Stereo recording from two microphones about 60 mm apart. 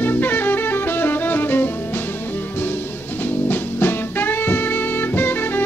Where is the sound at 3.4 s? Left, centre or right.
Left.